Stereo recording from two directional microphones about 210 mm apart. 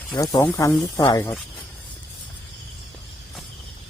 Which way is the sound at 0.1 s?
15° left (ahead or behind).